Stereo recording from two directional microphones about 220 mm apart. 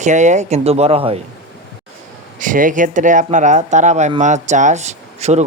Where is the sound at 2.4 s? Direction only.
35° right (ahead or behind).